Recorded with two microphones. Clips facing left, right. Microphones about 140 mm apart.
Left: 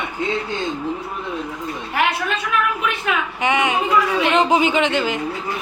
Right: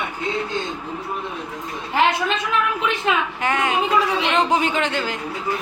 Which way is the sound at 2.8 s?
25° right (ahead or behind).